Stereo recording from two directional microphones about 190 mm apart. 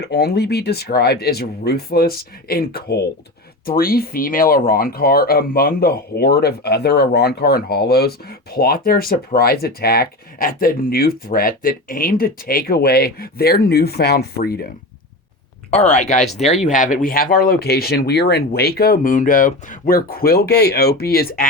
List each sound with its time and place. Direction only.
0.0 s speech: 60° left (ahead or behind)
15.7 s speech: 35° left (ahead or behind)